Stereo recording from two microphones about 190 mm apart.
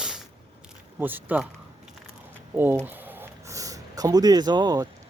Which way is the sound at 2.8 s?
10° right (ahead or behind).